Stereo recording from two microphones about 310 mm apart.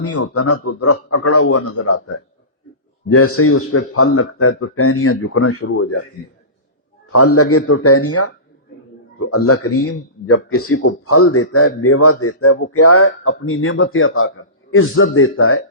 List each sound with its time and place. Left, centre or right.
0.0 s a man's voice: left
3.1 s a man's voice: left
7.1 s a man's voice: left